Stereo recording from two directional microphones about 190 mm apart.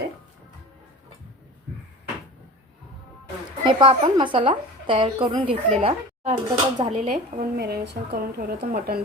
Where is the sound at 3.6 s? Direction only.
25° right (ahead or behind).